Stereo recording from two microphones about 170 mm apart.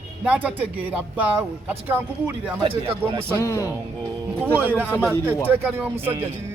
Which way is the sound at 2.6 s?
30° right (ahead or behind).